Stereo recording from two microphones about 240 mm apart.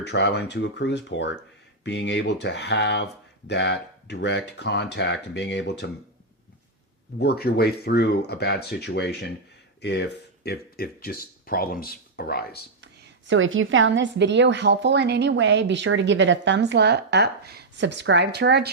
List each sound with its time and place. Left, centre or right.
0.0 s speech: left
7.2 s speech: left
12.8 s a woman's voice: right